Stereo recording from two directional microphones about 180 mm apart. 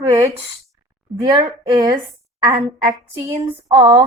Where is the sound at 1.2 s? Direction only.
20° right (ahead or behind).